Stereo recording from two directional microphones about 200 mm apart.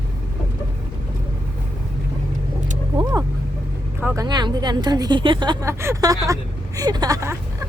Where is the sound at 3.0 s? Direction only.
20° right (ahead or behind).